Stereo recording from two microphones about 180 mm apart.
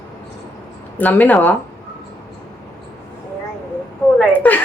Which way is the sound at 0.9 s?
10° left (ahead or behind).